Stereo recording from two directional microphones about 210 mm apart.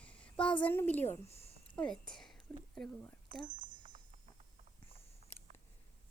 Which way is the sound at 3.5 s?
35° right (ahead or behind).